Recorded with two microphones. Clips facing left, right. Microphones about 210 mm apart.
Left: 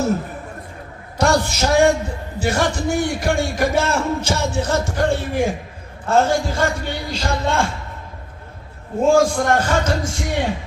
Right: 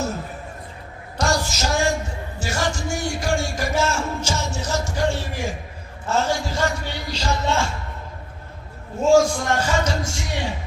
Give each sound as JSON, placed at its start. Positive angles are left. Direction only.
{"t": 1.2, "sound": "a sound", "side_deg": 60}
{"t": 6.1, "sound": "speech", "side_deg": 55}
{"t": 9.0, "sound": "a man's voice", "side_deg": 55}